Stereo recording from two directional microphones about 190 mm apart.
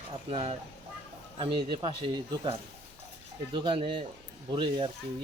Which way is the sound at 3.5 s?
25° right (ahead or behind).